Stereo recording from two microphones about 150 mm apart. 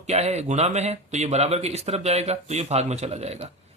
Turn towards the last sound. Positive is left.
turn(degrees=-45)  # may be behind; listen again after turning